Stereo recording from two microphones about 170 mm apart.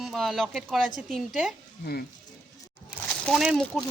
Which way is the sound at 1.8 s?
65° left (ahead or behind).